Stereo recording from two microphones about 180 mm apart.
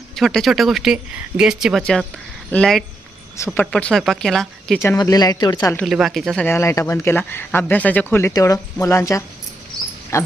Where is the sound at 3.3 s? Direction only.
15° left (ahead or behind).